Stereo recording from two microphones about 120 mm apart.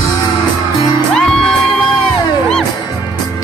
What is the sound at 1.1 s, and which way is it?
Music, 5° left (ahead or behind).